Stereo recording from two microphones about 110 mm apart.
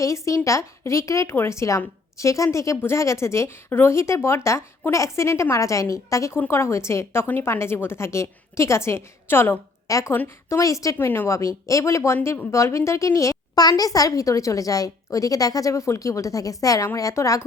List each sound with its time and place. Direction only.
0.0 s a woman's voice: 30° left (ahead or behind)
10.9 s a woman's voice: 20° left (ahead or behind)